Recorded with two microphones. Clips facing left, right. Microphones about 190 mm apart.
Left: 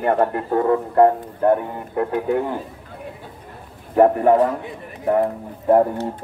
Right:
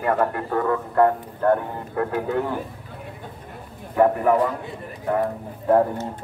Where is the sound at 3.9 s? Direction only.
30° left (ahead or behind).